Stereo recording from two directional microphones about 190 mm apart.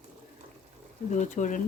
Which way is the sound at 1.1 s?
40° left (ahead or behind).